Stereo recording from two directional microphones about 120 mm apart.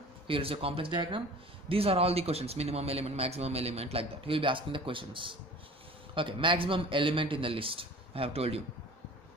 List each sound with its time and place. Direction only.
0.3 s a man's voice: 50° right (ahead or behind)